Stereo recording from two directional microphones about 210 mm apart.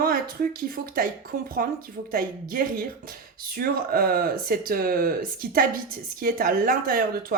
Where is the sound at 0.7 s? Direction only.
45° right (ahead or behind).